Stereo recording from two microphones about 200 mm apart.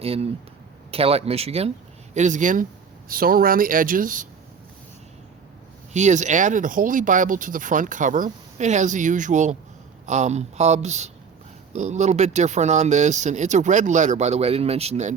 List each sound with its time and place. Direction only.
0.0 s speech: 30° right (ahead or behind)
5.9 s speech: 35° right (ahead or behind)